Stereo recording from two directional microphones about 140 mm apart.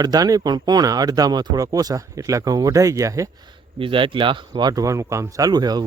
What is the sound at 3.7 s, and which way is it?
Speech, 40° right (ahead or behind).